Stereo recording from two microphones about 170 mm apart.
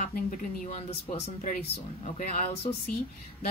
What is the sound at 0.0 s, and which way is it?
Speech, 50° left (ahead or behind).